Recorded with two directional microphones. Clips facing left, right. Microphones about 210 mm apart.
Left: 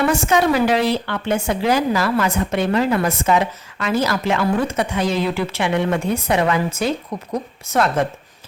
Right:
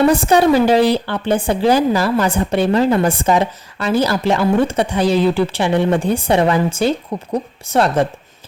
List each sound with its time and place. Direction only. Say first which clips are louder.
0.0 s a woman's voice: right 5 dB; 35° right (ahead or behind)